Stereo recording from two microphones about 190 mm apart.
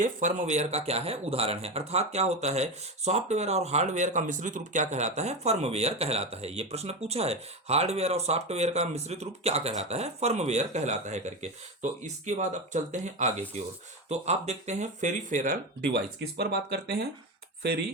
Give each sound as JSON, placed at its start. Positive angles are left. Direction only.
{"t": 0.0, "sound": "speech", "side_deg": -40}
{"t": 15.9, "sound": "speech", "side_deg": -55}